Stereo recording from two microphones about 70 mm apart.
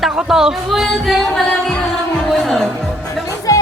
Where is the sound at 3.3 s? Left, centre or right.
Left.